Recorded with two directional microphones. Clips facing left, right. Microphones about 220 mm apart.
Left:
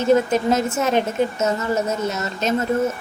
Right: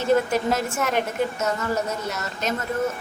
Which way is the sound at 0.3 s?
20° left (ahead or behind).